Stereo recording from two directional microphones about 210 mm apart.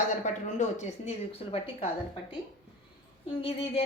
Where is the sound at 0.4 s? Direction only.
35° left (ahead or behind).